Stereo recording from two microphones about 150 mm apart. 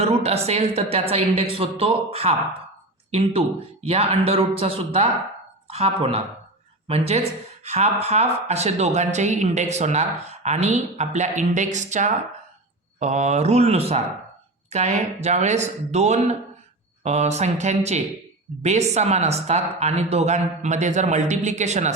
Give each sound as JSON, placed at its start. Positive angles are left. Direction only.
{"t": 0.0, "sound": "a woman's voice", "side_deg": -45}